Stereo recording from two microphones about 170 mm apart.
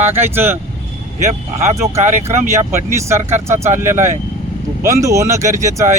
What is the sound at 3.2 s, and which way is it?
Speech, 45° right (ahead or behind).